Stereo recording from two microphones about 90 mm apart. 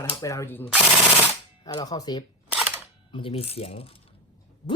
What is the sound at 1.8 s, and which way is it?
Speech, 45° left (ahead or behind).